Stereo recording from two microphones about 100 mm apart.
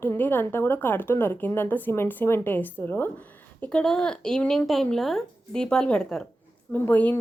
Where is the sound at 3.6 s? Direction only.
10° left (ahead or behind).